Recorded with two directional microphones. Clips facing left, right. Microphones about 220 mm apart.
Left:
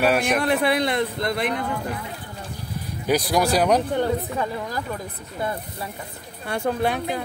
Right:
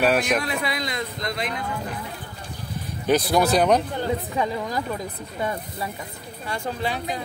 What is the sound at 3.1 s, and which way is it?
Speech, 10° left (ahead or behind).